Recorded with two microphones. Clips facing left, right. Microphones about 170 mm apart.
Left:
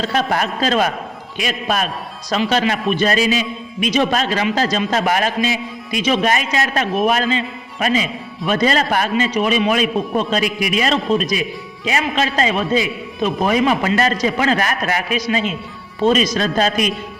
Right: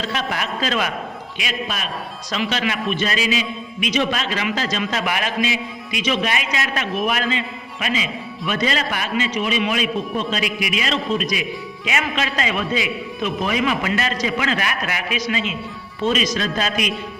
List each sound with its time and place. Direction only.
0.1 s a man's voice: 40° left (ahead or behind)